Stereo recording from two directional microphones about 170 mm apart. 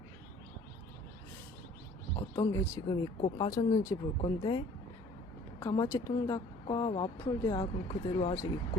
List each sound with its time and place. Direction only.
2.1 s speech: 20° left (ahead or behind)